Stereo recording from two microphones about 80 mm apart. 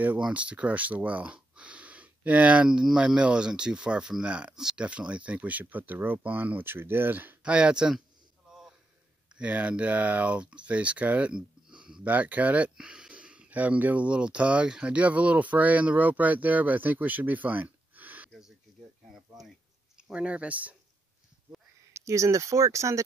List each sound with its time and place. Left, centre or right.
0.0 s speech: centre
7.4 s speech: centre
9.3 s speech: centre
20.0 s speech: centre
21.9 s speech: right